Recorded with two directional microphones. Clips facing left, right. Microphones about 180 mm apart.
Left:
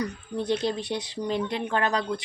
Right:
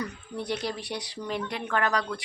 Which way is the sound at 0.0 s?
20° left (ahead or behind).